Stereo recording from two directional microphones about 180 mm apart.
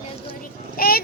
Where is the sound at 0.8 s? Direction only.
55° left (ahead or behind).